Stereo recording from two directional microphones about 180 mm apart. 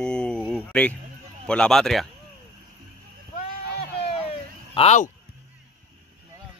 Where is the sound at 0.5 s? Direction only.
5° left (ahead or behind).